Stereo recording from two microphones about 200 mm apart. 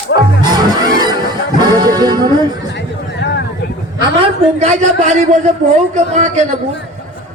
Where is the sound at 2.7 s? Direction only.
60° left (ahead or behind).